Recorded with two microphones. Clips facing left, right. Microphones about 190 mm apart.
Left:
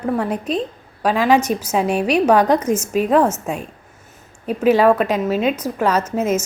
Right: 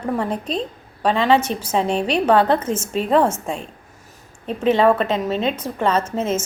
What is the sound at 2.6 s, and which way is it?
Speech, 25° right (ahead or behind).